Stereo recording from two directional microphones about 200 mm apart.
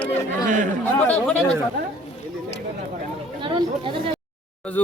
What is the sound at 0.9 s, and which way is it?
Speech, 5° left (ahead or behind).